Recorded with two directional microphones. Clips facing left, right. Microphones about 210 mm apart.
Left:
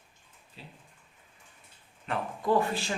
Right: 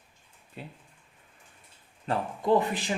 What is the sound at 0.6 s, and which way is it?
Speech, 55° right (ahead or behind).